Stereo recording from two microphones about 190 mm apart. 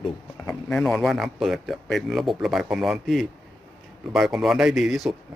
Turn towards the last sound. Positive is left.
turn(degrees=0)  # may be behind; listen again after turning